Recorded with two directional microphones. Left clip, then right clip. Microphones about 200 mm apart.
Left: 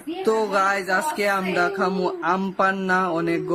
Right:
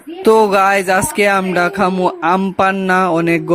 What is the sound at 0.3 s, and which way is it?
Speech, 35° right (ahead or behind).